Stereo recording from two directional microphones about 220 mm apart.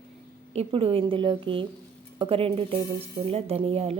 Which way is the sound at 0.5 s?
25° right (ahead or behind).